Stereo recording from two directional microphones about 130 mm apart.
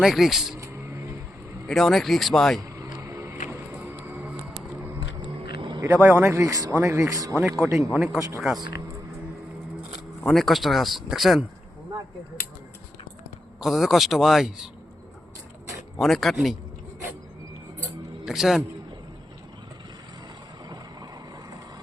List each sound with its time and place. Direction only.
0.0 s speech: centre (ahead or behind)
0.6 s a sound: 20° right (ahead or behind)
1.6 s speech: centre (ahead or behind)
2.9 s a sound: 25° right (ahead or behind)
3.5 s music: 15° right (ahead or behind)
4.9 s a sound: 35° right (ahead or behind)
5.8 s a man's voice: 20° right (ahead or behind)
7.3 s speech: centre (ahead or behind)
10.2 s speech: centre (ahead or behind)
13.6 s speech: centre (ahead or behind)
16.0 s speech: centre (ahead or behind)
18.3 s speech: 5° right (ahead or behind)